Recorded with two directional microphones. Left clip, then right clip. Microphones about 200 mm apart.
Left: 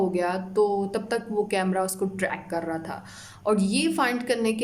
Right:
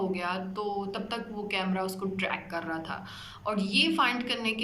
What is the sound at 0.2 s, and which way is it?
Speech, 50° left (ahead or behind).